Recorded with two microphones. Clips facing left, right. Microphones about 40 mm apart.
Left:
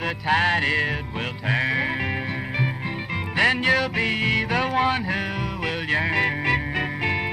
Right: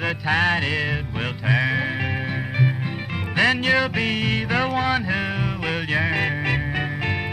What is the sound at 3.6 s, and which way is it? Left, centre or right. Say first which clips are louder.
Music: right 1 dB; centre.